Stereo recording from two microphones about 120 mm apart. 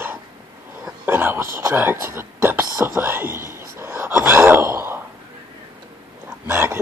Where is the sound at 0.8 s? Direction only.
20° right (ahead or behind).